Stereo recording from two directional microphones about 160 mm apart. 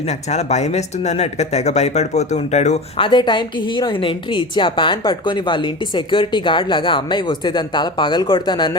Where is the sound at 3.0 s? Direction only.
30° left (ahead or behind).